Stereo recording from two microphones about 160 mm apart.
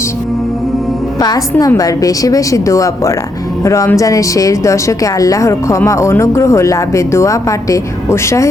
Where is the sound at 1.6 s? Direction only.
20° left (ahead or behind).